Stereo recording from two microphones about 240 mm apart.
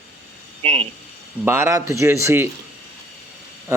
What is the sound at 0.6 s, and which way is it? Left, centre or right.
Speech, right.